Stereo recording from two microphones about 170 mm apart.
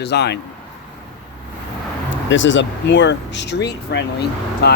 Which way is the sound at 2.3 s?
90° left.